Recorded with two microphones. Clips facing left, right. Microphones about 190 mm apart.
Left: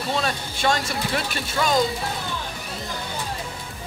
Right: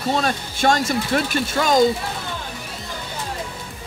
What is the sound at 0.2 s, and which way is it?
Speech, 45° right (ahead or behind).